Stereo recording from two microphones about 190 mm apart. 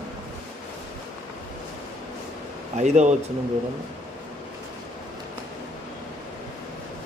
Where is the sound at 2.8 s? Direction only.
40° right (ahead or behind).